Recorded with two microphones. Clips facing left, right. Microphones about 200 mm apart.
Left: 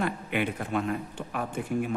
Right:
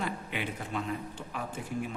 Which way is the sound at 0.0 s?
60° left (ahead or behind).